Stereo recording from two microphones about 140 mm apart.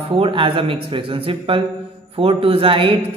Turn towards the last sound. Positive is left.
turn(degrees=-40)  # may be behind; listen again after turning